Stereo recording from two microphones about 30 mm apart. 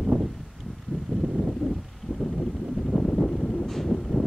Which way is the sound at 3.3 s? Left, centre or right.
Left.